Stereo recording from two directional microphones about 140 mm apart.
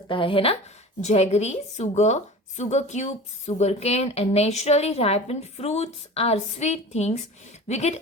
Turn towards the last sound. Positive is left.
turn(degrees=55)  # may be behind; listen again after turning